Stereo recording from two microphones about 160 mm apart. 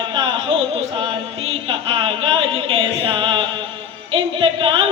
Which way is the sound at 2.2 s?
35° right (ahead or behind).